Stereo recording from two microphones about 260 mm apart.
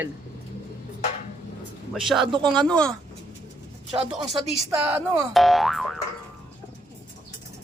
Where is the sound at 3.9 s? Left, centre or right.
Centre.